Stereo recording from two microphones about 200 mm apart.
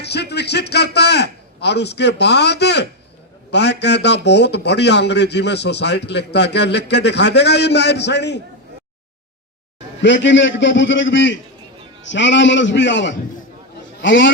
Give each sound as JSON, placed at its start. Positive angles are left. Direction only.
{"t": 0.0, "sound": "a man's voice", "side_deg": 55}
{"t": 10.0, "sound": "a man's voice", "side_deg": 65}